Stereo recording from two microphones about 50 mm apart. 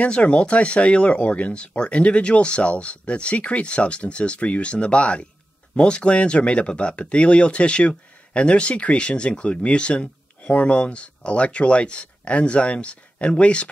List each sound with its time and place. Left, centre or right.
0.0 s speech: left